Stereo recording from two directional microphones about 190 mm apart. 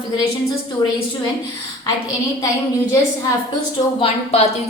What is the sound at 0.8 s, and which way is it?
Speech, 20° left (ahead or behind).